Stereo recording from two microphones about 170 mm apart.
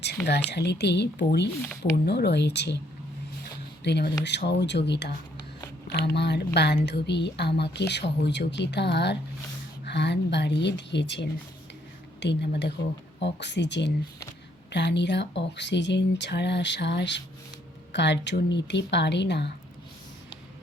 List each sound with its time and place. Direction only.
0.3 s speech: 80° left
3.8 s speech: 75° left (ahead or behind)